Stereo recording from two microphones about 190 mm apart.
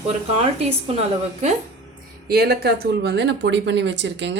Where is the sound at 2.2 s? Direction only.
55° right (ahead or behind).